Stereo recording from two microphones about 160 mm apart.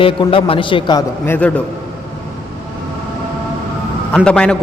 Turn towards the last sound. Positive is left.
turn(degrees=5)  # may be behind; listen again after turning